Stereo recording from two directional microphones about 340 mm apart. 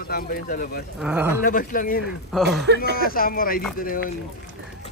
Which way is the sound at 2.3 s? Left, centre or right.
Centre.